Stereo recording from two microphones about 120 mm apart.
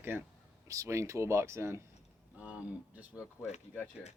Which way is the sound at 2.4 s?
10° right (ahead or behind).